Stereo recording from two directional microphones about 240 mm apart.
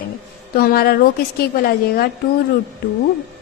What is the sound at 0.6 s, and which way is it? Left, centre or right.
A woman's voice, left.